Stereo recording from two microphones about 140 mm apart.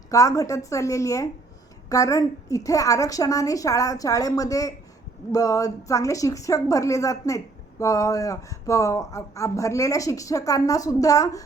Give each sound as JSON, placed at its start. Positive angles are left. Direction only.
{"t": 0.1, "sound": "a woman's voice", "side_deg": 25}